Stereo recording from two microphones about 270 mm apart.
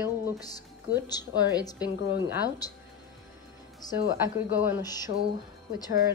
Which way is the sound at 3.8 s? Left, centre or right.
Centre.